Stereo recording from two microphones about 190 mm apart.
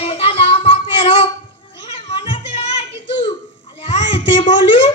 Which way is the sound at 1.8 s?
30° left (ahead or behind).